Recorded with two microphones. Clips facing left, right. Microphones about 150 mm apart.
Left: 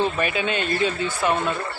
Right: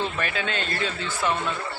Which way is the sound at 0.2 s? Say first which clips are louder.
Left 5 dB; 15° left (ahead or behind).